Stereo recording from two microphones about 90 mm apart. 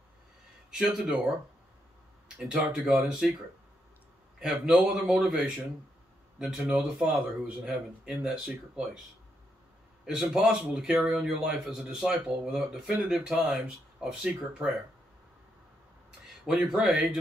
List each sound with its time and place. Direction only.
0.7 s speech: 5° right (ahead or behind)
2.2 s a man's voice: 5° right (ahead or behind)
4.4 s a man's voice: 5° right (ahead or behind)
10.0 s a man's voice: 5° right (ahead or behind)
16.4 s a man's voice: 5° right (ahead or behind)